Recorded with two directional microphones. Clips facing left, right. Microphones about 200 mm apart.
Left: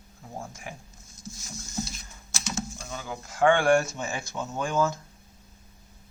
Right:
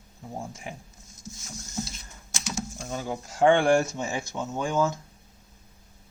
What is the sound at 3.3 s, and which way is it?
Speech, 25° right (ahead or behind).